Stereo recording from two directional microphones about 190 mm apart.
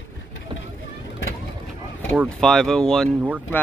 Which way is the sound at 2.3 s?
Centre (ahead or behind).